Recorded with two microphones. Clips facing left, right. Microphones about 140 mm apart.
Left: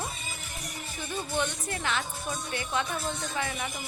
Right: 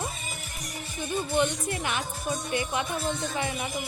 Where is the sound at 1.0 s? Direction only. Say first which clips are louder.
Right 5 dB; 15° right (ahead or behind).